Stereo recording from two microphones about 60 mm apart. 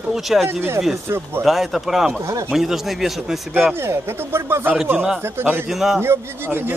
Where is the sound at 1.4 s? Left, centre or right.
Centre.